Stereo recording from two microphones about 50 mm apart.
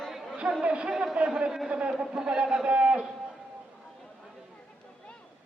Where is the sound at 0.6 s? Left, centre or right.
Right.